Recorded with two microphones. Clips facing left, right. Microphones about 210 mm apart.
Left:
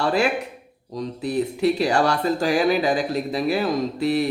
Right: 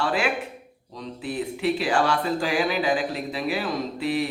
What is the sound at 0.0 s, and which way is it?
A man's voice, 40° left (ahead or behind).